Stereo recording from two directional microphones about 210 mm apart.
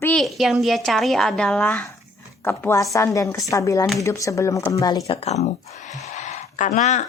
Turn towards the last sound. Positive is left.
turn(degrees=35)  # may be behind; listen again after turning